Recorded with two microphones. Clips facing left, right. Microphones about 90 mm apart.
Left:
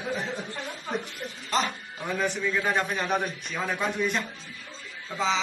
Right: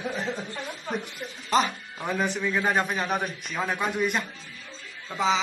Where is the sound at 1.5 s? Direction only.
15° right (ahead or behind).